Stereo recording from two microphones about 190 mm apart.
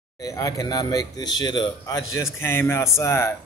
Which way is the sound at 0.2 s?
15° left (ahead or behind).